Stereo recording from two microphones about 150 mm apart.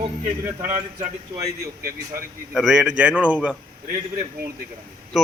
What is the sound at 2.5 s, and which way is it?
A man's voice, 5° right (ahead or behind).